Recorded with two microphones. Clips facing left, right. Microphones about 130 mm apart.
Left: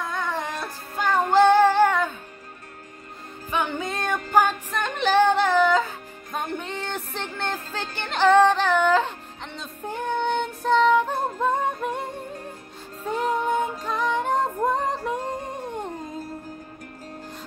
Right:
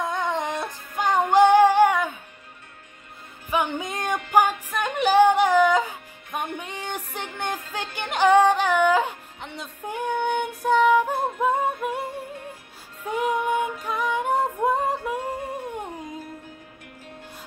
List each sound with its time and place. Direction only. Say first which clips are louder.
0.0 s music: right 3 dB; 20° right (ahead or behind)
3.4 s music: right 1 dB; 15° right (ahead or behind)